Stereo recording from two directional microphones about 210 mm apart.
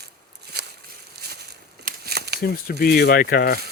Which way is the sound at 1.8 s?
50° right (ahead or behind).